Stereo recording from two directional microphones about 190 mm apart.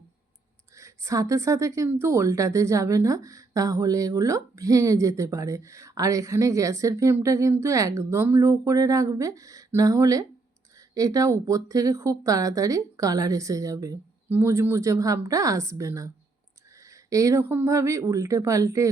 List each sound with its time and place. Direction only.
0.8 s speech: 15° right (ahead or behind)